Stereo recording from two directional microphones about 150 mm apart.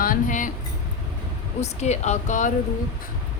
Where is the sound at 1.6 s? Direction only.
50° left (ahead or behind).